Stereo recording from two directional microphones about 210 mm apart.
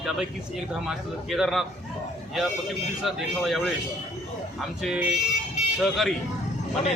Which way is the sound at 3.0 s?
Centre (ahead or behind).